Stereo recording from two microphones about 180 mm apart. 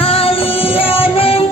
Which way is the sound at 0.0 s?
30° left (ahead or behind).